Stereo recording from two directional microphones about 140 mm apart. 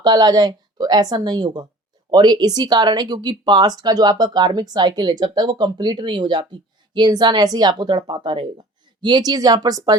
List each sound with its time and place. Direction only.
0.0 s speech: 30° right (ahead or behind)